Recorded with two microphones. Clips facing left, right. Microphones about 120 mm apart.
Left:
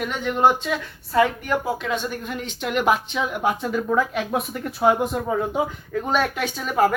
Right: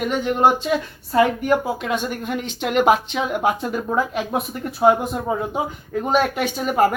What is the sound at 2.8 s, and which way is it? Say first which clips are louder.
Speech: right 3 dB; 75° right (ahead or behind).